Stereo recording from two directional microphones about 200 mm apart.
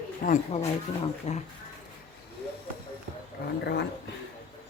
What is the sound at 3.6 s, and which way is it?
Speech, 55° left (ahead or behind).